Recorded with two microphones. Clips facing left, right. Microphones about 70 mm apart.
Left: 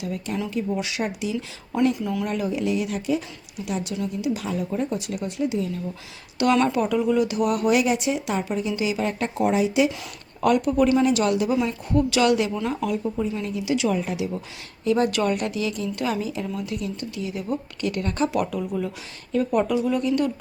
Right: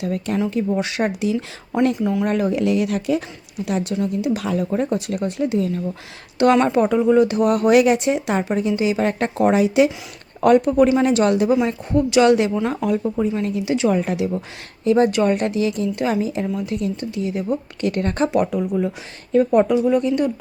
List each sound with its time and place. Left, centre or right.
0.0 s speech: right
2.0 s speech: right
2.2 s speech: right
3.7 s speech: right
4.4 s speech: right
6.4 s speech: right
10.4 s speech: right
11.6 s speech: right
14.0 s speech: right
14.8 s speech: right